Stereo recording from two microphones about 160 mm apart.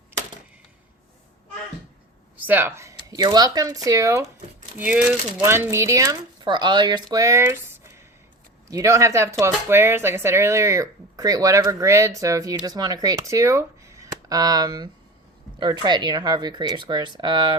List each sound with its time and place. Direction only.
2.4 s speech: 10° right (ahead or behind); by 17.5 s 30° right (ahead or behind)